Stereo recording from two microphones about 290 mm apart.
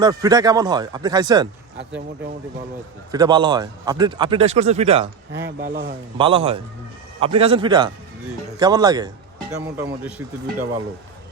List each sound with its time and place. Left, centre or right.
0.0 s a man's voice: centre
3.1 s a man's voice: centre
5.3 s speech: right
6.1 s a man's voice: centre